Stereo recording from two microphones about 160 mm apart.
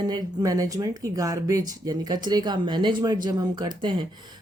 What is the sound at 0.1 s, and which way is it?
A woman's voice, 25° right (ahead or behind).